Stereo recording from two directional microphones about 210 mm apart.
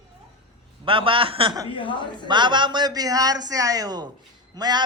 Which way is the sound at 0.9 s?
25° right (ahead or behind).